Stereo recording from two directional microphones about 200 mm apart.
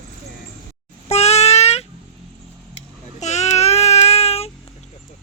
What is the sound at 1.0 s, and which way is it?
Child singing, 30° left (ahead or behind).